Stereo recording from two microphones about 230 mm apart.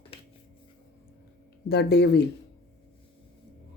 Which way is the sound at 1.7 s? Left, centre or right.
Left.